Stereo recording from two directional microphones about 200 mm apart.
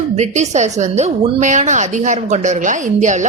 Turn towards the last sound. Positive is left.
turn(degrees=-35)  # may be behind; listen again after turning